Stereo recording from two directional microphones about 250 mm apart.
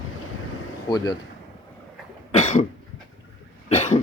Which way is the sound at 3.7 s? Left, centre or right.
Left.